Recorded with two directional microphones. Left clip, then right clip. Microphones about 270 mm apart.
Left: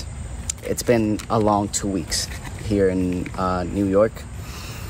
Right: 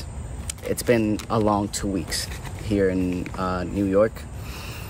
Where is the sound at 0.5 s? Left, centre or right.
Centre.